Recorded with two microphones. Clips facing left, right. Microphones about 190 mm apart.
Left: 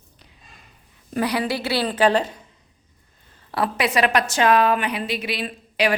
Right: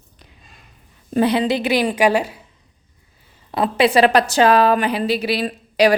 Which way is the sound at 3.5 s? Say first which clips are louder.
Right 6 dB; 25° right (ahead or behind).